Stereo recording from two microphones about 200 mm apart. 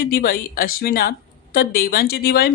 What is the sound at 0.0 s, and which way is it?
Speech, 50° left (ahead or behind).